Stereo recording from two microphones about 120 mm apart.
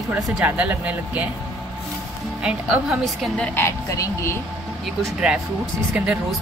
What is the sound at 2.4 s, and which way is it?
A woman's voice, 10° right (ahead or behind).